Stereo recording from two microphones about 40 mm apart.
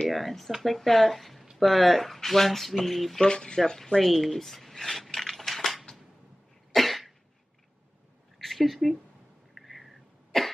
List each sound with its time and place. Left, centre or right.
0.1 s speech: centre
3.3 s speech: left
4.0 s a sound: centre
6.7 s cough: centre
8.4 s speech: centre
9.5 s a sound: centre
10.3 s cough: centre